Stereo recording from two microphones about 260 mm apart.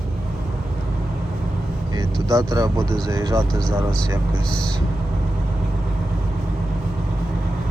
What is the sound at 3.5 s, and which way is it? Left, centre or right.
Speech, centre.